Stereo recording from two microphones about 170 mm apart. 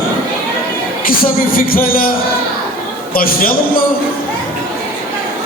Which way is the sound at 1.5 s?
60° left (ahead or behind).